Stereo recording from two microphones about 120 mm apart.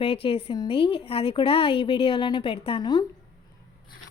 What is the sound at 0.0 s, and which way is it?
Speech, 50° left (ahead or behind).